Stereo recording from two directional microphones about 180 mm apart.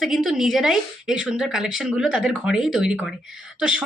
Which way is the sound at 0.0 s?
Centre (ahead or behind).